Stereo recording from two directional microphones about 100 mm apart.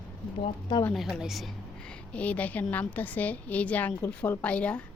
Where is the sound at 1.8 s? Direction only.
10° left (ahead or behind).